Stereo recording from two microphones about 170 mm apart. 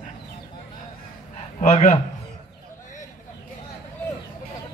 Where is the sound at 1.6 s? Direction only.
40° left (ahead or behind).